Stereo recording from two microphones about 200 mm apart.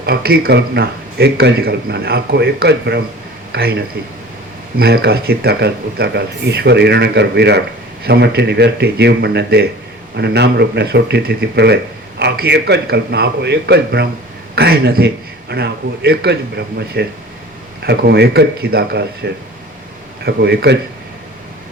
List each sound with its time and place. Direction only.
0.0 s a man's voice: 50° right (ahead or behind)